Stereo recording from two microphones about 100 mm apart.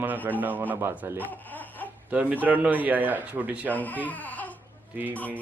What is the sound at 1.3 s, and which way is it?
Laughter, 15° left (ahead or behind).